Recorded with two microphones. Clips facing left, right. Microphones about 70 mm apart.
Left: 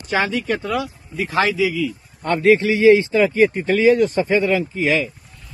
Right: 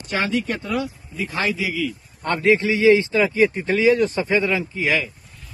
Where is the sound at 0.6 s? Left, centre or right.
Left.